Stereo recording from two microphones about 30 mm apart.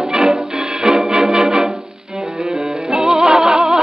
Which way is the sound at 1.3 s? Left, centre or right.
Right.